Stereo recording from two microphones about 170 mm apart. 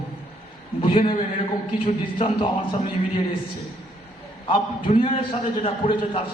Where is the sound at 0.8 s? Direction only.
30° left (ahead or behind).